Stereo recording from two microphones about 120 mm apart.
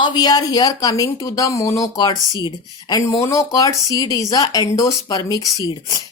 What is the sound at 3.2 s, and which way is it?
Speech, 25° left (ahead or behind).